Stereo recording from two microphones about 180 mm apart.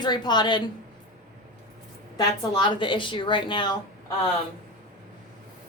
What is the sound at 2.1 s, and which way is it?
A woman's voice, 25° left (ahead or behind).